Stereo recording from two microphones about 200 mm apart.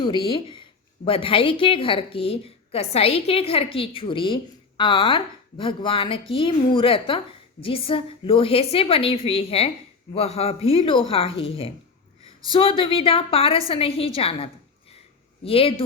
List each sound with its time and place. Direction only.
0.0 s a woman's voice: 25° left (ahead or behind)